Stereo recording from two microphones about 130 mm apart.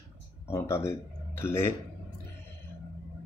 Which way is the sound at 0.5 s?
20° left (ahead or behind).